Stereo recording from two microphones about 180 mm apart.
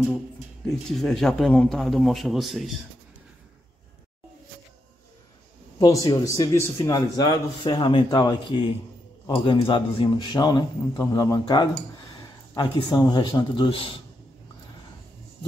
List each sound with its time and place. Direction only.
0.7 s speech: centre (ahead or behind)
5.8 s a man's voice: 20° left (ahead or behind)